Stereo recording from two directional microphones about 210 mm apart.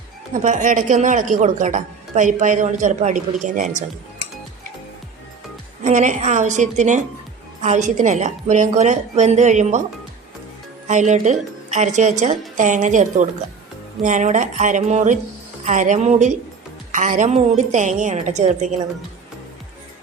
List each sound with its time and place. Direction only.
0.4 s a woman's voice: 35° right (ahead or behind)
5.8 s a woman's voice: 35° right (ahead or behind)
10.8 s a woman's voice: 35° right (ahead or behind)